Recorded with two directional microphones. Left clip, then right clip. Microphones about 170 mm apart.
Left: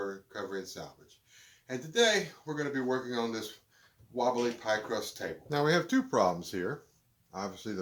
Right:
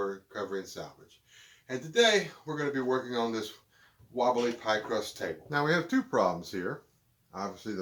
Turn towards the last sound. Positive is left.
turn(degrees=35)  # may be behind; listen again after turning